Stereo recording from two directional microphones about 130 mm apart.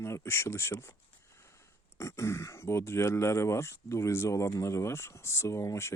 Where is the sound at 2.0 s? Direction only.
20° left (ahead or behind).